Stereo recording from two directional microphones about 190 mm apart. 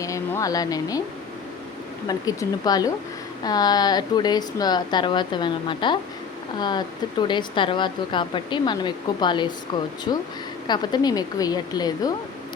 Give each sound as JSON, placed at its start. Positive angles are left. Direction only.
{"t": 0.0, "sound": "speech", "side_deg": 15}
{"t": 2.0, "sound": "speech", "side_deg": 20}